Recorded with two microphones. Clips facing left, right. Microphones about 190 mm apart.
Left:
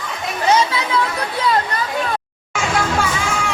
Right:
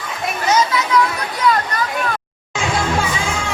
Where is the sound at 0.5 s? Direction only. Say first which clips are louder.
Right 2 dB; 30° left (ahead or behind).